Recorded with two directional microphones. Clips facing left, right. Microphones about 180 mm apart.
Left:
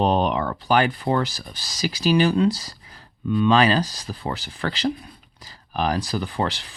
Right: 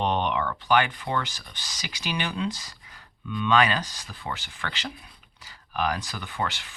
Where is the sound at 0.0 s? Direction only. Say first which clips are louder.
Left 5 dB; 35° left (ahead or behind).